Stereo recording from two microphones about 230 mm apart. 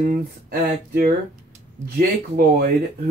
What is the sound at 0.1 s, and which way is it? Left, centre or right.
Speech, right.